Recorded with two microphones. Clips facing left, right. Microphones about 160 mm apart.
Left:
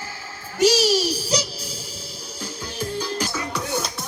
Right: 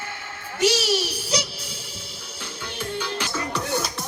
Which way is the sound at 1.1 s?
40° left (ahead or behind).